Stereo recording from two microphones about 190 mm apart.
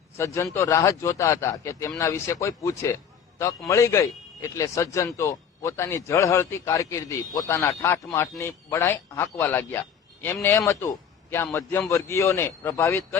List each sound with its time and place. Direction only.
0.5 s a man's voice: 15° left (ahead or behind)